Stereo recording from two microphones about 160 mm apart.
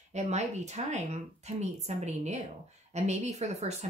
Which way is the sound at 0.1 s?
45° right (ahead or behind).